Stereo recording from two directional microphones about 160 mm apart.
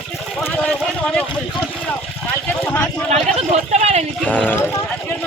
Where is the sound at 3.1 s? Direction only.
45° right (ahead or behind).